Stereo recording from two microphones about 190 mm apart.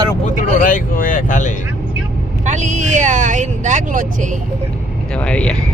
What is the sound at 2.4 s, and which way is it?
Speech, 40° right (ahead or behind).